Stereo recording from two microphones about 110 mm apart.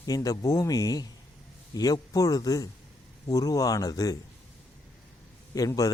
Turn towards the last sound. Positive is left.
turn(degrees=35)  # may be behind; listen again after turning